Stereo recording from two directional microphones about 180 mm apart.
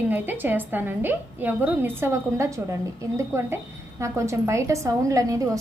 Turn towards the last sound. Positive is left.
turn(degrees=-20)  # may be behind; listen again after turning